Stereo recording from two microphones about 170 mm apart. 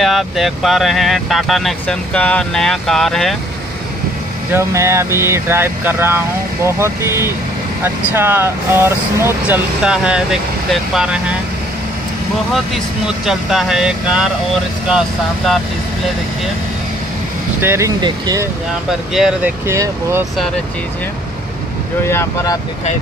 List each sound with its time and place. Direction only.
0.0 s speech: centre (ahead or behind)
4.5 s speech: 15° right (ahead or behind)
12.5 s speech: centre (ahead or behind)
17.6 s speech: 15° right (ahead or behind)
18.9 s speech: 5° right (ahead or behind)
19.6 s speech: 15° right (ahead or behind)
22.0 s speech: 15° left (ahead or behind)